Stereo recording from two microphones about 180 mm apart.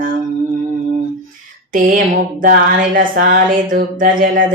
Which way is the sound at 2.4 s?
50° right (ahead or behind).